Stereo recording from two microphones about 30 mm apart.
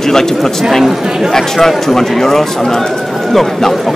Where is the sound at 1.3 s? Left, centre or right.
Centre.